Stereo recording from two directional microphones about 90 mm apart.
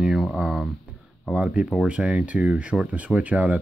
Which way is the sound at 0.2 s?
5° right (ahead or behind).